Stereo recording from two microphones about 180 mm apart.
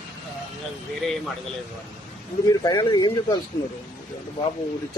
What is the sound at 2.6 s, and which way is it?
Speech, 25° left (ahead or behind).